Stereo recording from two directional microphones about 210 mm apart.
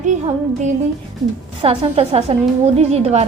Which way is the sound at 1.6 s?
25° right (ahead or behind).